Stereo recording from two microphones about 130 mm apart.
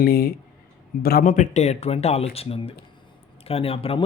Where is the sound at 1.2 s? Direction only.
70° left (ahead or behind).